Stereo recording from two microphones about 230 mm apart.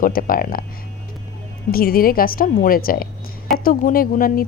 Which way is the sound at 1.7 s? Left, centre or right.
Left.